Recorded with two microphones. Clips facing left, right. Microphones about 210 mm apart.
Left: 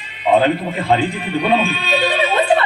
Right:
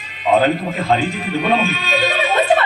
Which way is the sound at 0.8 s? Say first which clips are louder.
Left 2 dB; 30° left (ahead or behind).